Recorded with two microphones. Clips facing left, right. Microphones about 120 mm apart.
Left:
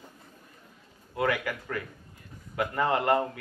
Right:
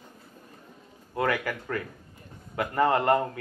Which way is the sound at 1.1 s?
45° right (ahead or behind).